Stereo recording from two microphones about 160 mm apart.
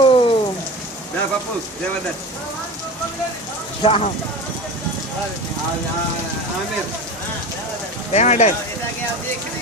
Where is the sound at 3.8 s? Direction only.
40° left (ahead or behind).